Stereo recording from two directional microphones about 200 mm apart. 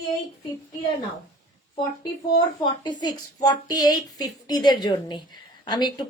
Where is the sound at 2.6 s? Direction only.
20° left (ahead or behind).